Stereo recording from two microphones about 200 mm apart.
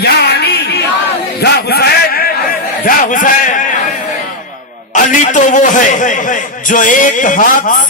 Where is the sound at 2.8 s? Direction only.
40° left (ahead or behind).